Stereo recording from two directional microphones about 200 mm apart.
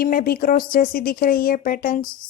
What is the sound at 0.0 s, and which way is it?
Speech, 45° left (ahead or behind).